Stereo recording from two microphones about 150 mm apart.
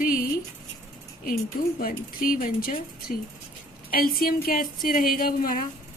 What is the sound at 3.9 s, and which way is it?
Speech, 75° left (ahead or behind).